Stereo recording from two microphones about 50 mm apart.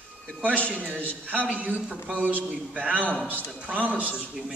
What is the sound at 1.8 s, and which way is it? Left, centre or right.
Speech, centre.